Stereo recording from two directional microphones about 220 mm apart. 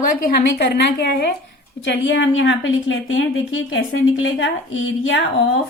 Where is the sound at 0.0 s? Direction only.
40° left (ahead or behind); by 5.2 s 60° left (ahead or behind).